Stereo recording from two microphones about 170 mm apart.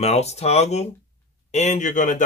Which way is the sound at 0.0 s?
40° left (ahead or behind).